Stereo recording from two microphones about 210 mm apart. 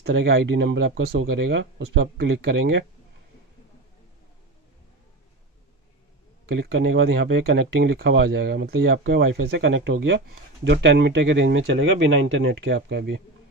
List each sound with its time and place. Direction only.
0.0 s speech: 50° right (ahead or behind)
6.4 s speech: 50° right (ahead or behind)
8.7 s speech: 65° right (ahead or behind)